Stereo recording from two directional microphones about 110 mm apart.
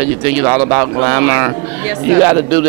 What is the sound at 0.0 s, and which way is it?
A man's voice, 20° right (ahead or behind).